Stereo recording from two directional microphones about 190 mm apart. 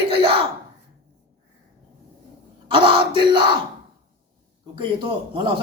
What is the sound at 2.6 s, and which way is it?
Speech, 25° right (ahead or behind).